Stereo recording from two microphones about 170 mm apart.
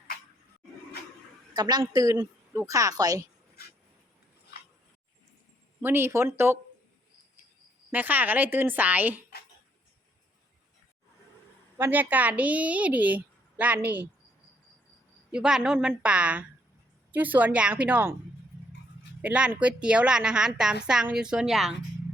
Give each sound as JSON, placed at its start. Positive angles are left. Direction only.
{"t": 1.5, "sound": "a woman's voice", "side_deg": -25}
{"t": 5.8, "sound": "a woman's voice", "side_deg": -15}
{"t": 7.9, "sound": "a woman's voice", "side_deg": -10}
{"t": 11.8, "sound": "a woman's voice", "side_deg": -10}
{"t": 15.3, "sound": "a woman's voice", "side_deg": -5}
{"t": 19.2, "sound": "a woman's voice", "side_deg": -5}